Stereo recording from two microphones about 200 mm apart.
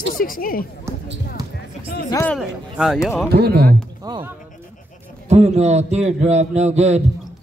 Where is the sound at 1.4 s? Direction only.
20° right (ahead or behind).